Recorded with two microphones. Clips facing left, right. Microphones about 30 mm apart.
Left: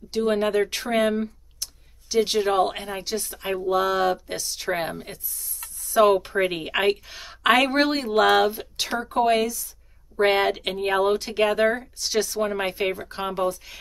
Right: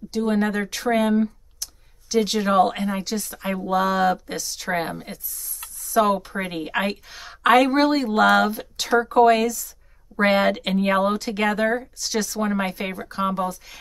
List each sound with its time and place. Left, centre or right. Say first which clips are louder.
0.1 s a woman's voice: left 1 dB; left; by 6.0 s centre
6.3 s a woman's voice: left 2 dB; centre